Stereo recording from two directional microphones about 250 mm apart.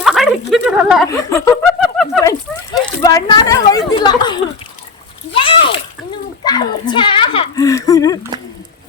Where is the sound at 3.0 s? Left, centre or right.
Centre.